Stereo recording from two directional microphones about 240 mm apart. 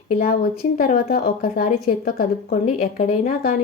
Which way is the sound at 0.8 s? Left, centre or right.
Left.